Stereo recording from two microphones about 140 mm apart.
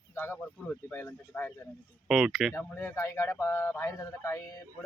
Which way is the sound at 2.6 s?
15° left (ahead or behind).